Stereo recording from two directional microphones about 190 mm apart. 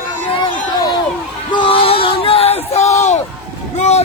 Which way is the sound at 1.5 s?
25° left (ahead or behind).